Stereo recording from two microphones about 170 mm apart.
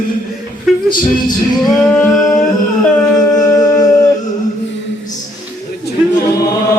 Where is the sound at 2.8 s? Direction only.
5° left (ahead or behind).